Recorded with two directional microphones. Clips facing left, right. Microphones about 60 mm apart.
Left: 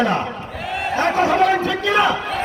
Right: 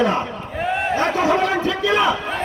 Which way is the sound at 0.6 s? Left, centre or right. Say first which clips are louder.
Right 2 dB; right.